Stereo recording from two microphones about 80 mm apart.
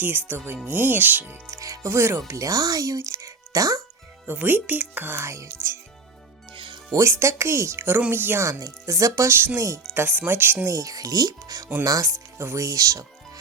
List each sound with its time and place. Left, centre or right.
0.0 s speech: right
1.5 s speech: right
4.3 s speech: right
6.5 s music: right
6.9 s speech: right
8.4 s speech: right
9.9 s speech: right
10.7 s speech: right